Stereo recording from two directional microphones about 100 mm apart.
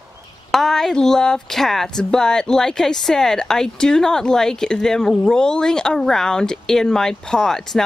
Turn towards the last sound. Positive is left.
turn(degrees=5)  # may be behind; listen again after turning